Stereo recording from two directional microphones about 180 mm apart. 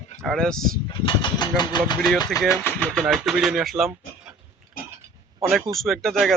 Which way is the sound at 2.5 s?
15° left (ahead or behind).